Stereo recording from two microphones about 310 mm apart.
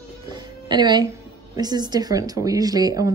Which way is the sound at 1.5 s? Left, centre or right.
Centre.